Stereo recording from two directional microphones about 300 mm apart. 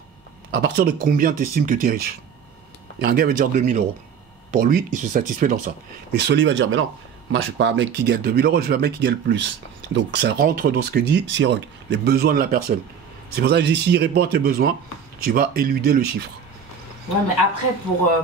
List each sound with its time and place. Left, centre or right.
0.5 s speech: right